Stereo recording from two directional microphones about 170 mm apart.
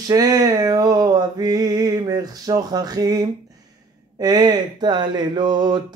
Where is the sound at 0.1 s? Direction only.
20° right (ahead or behind).